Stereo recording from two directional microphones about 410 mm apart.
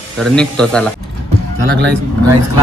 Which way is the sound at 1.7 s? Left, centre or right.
Right.